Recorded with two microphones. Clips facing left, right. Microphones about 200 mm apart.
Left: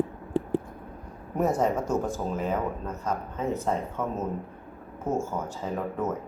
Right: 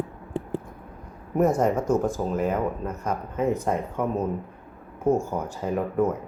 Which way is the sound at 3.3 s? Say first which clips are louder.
Right 5 dB; 15° right (ahead or behind).